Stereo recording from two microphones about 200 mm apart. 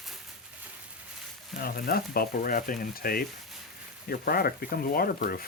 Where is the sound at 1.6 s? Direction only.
50° left (ahead or behind).